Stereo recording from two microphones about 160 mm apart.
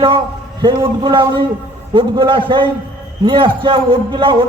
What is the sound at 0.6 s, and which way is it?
A man's voice, 30° right (ahead or behind).